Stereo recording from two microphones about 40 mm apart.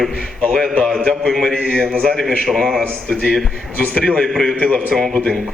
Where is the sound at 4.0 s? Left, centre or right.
Left.